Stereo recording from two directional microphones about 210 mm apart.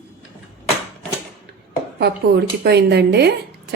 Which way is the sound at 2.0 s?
50° right (ahead or behind).